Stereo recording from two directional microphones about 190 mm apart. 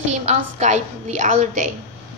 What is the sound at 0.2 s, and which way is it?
A woman's voice, 35° right (ahead or behind).